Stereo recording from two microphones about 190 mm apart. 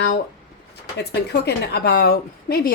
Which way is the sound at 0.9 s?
55° left (ahead or behind).